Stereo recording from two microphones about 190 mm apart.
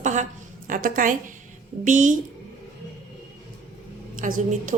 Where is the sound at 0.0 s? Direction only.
40° right (ahead or behind).